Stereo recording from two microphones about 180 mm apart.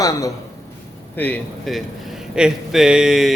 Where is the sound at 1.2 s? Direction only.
10° left (ahead or behind).